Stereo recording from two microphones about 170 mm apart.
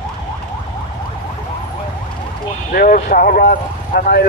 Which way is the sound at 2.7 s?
55° left (ahead or behind).